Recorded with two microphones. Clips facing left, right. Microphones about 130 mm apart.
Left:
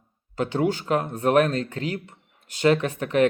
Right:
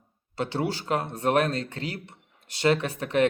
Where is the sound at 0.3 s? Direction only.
35° right (ahead or behind).